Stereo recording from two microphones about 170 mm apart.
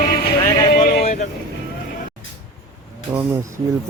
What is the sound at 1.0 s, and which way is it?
Vehicle, 45° left (ahead or behind).